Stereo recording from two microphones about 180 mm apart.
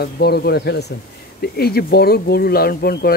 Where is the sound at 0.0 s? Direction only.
60° left (ahead or behind).